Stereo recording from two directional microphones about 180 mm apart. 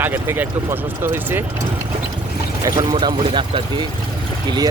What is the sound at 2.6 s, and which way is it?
Speech, 20° right (ahead or behind).